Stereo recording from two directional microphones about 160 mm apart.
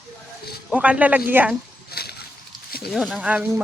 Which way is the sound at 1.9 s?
80° left.